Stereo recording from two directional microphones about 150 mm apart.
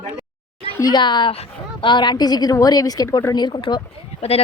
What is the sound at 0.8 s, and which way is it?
A woman's voice, 30° left (ahead or behind).